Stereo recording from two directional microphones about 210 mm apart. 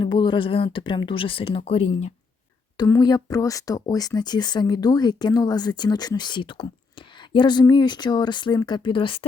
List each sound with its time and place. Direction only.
0.0 s speech: 20° left (ahead or behind)
2.7 s speech: 20° left (ahead or behind)